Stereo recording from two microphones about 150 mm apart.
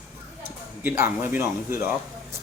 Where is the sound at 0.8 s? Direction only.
15° right (ahead or behind).